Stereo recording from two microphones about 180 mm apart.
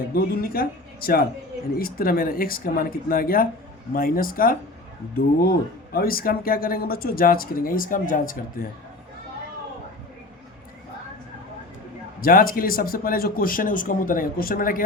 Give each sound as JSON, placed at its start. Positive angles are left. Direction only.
{"t": 0.1, "sound": "speech", "side_deg": 55}
{"t": 12.2, "sound": "speech", "side_deg": 55}